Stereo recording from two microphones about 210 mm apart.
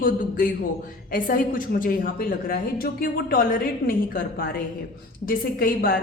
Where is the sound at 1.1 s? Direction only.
40° left (ahead or behind).